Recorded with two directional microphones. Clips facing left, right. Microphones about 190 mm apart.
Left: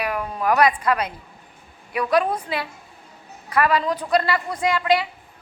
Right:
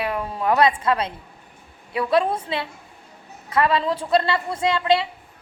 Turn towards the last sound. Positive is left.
turn(degrees=-25)  # may be behind; listen again after turning